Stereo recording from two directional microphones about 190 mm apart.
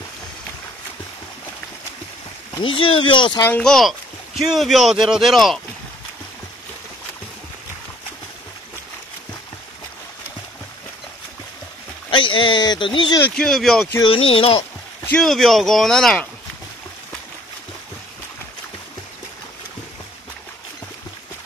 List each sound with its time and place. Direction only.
2.6 s speech: 25° left (ahead or behind)
3.4 s speech: 5° left (ahead or behind)
12.1 s speech: 25° left (ahead or behind)
13.2 s speech: 5° left (ahead or behind)
13.9 s speech: 25° left (ahead or behind)
15.0 s speech: centre (ahead or behind)